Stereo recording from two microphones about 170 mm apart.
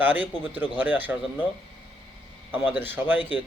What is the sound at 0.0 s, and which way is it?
A man's voice, 10° right (ahead or behind).